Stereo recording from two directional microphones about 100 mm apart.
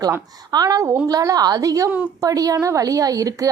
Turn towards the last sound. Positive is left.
turn(degrees=-35)  # may be behind; listen again after turning